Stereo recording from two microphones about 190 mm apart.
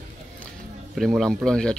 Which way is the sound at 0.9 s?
Centre (ahead or behind).